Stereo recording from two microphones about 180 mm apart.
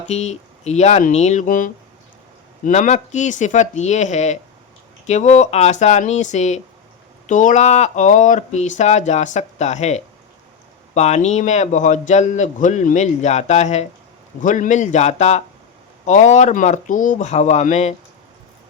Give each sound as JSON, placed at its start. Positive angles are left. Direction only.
{"t": 0.1, "sound": "a man's voice", "side_deg": 40}